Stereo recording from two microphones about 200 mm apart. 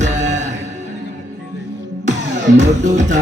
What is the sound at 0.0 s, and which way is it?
Music, 35° right (ahead or behind).